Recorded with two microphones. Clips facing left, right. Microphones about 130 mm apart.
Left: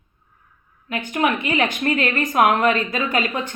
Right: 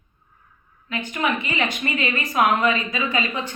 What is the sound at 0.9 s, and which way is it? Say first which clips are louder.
A woman's voice: left 3 dB; 60° left (ahead or behind).